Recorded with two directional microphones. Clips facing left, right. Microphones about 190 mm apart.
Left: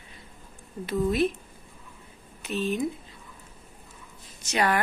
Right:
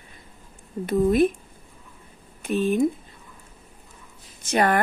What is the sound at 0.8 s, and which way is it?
Speech, 50° right (ahead or behind).